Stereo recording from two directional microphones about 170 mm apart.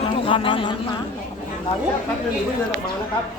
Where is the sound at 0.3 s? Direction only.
30° left (ahead or behind).